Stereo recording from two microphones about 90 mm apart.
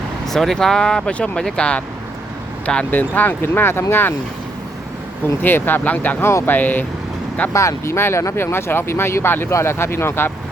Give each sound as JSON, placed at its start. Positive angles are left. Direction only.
{"t": 0.3, "sound": "speech", "side_deg": 5}
{"t": 5.4, "sound": "speech", "side_deg": 20}
{"t": 7.5, "sound": "speech", "side_deg": 35}